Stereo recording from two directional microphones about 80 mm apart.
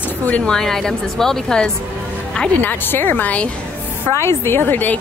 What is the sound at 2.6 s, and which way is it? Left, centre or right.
Speech, left.